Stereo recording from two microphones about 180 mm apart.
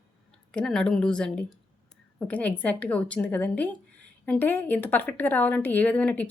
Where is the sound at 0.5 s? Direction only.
5° left (ahead or behind).